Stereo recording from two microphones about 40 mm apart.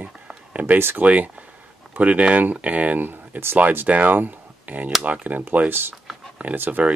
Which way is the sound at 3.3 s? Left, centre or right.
Right.